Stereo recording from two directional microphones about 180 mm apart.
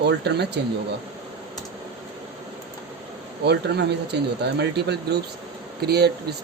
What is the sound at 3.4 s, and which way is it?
Speech, 70° right (ahead or behind).